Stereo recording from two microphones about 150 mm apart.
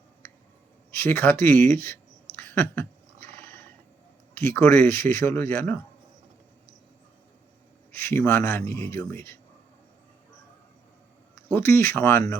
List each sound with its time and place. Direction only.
0.9 s speech: 15° left (ahead or behind)
2.3 s a sound: 15° left (ahead or behind)
4.4 s speech: 15° left (ahead or behind)
7.9 s speech: 15° left (ahead or behind)
11.4 s speech: 15° left (ahead or behind)